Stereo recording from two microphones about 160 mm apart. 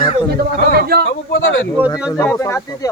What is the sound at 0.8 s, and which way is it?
Speech, 75° right (ahead or behind).